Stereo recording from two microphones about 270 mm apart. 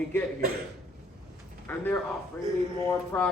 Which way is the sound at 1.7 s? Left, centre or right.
Centre.